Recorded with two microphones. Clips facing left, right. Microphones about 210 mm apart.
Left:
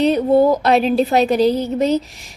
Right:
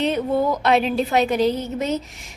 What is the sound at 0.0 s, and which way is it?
A woman's voice, 35° left (ahead or behind).